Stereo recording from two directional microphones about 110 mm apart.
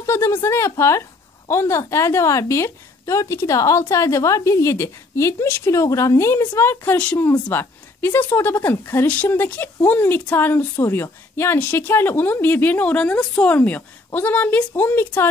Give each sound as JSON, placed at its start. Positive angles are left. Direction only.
{"t": 0.0, "sound": "a woman's voice", "side_deg": 25}